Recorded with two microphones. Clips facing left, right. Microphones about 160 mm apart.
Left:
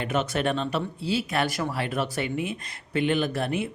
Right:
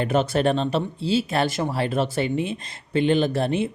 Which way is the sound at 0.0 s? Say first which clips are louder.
Right 5 dB; 35° right (ahead or behind).